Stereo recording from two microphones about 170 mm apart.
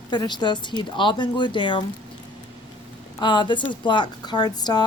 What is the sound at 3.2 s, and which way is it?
A woman's voice, 30° left (ahead or behind).